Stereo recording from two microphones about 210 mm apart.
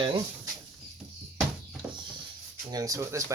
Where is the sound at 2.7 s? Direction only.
15° right (ahead or behind).